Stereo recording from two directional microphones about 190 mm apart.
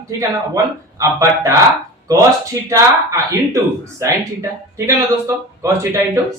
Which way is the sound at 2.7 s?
15° right (ahead or behind).